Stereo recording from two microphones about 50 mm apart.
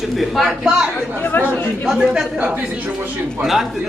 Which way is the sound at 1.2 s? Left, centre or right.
Left.